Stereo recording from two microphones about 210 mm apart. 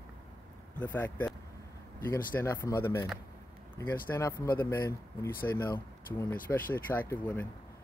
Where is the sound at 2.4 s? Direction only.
10° left (ahead or behind).